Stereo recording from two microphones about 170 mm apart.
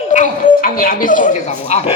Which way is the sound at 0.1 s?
50° left (ahead or behind).